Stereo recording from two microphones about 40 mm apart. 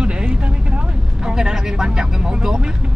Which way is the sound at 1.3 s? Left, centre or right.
Centre.